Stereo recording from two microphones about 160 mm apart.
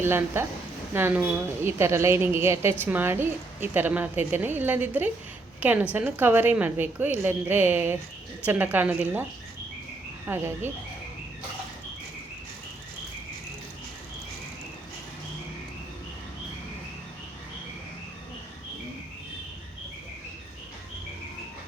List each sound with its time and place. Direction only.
0.0 s a woman's voice: 15° right (ahead or behind)
10.2 s a woman's voice: 15° right (ahead or behind)